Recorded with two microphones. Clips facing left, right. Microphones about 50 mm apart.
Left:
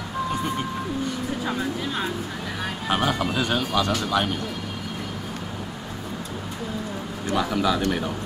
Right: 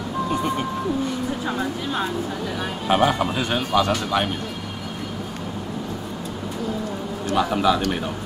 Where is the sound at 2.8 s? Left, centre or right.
Centre.